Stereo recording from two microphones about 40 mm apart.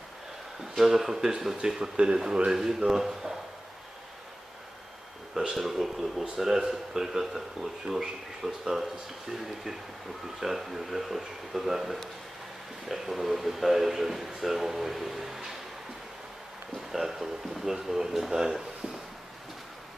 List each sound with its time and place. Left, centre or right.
0.8 s speech: centre
5.5 s speech: centre
10.4 s speech: centre
16.9 s speech: centre